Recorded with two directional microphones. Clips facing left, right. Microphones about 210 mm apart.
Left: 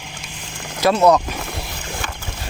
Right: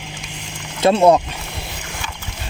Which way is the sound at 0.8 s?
25° right (ahead or behind).